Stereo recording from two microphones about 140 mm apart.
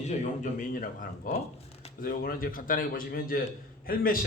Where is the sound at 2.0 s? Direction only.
90° left.